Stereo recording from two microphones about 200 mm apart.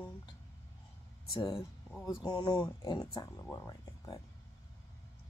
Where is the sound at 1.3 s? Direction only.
15° left (ahead or behind).